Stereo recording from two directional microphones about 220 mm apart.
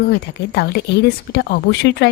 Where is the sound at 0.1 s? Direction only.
45° left (ahead or behind).